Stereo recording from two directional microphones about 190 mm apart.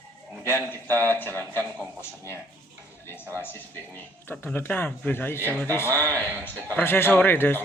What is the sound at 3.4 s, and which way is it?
A man's voice, 10° left (ahead or behind).